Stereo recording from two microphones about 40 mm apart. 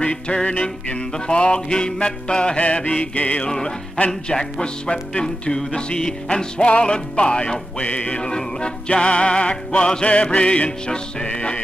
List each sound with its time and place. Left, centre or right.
0.0 s music: left
3.4 s music: centre
7.8 s music: left
8.2 s music: left